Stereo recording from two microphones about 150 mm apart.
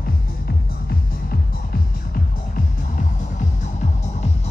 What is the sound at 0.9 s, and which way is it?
Music, 80° left.